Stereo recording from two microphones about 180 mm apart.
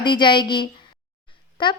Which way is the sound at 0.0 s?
25° left (ahead or behind).